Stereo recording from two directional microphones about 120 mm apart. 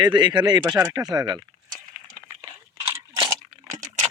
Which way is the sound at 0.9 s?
35° right (ahead or behind).